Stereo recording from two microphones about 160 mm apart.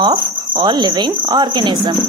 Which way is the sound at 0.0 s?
25° right (ahead or behind).